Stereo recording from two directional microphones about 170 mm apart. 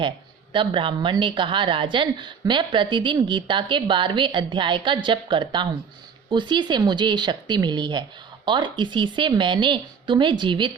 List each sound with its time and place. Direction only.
0.5 s a woman's voice: 30° right (ahead or behind)